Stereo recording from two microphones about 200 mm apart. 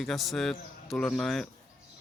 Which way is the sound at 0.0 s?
Centre (ahead or behind).